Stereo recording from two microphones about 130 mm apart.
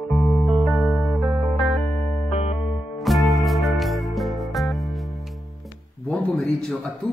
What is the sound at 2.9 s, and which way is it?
Music, centre (ahead or behind).